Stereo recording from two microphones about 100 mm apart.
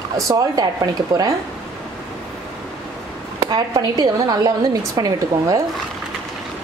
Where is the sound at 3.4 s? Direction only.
40° right (ahead or behind).